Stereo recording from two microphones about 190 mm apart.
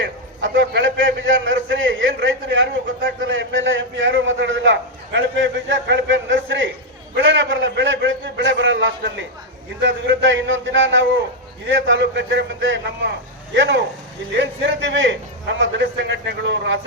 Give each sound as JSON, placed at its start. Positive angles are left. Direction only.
{"t": 0.0, "sound": "a man's voice", "side_deg": -80}